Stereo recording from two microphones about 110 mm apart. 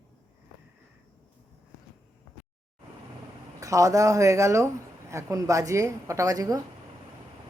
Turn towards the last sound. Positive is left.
turn(degrees=-30)  # may be behind; listen again after turning